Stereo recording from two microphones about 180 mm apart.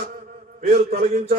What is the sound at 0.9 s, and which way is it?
Speech, 45° right (ahead or behind).